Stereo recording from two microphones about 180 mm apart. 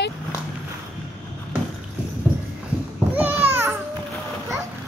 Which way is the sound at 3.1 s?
10° right (ahead or behind).